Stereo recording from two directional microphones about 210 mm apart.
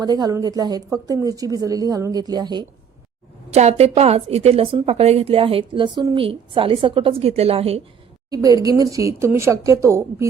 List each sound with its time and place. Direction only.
0.0 s a woman's voice: 20° right (ahead or behind)
3.5 s a woman's voice: 30° right (ahead or behind)
8.3 s a woman's voice: 15° right (ahead or behind)